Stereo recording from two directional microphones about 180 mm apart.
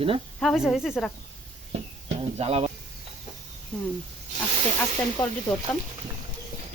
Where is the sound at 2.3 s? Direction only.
30° right (ahead or behind).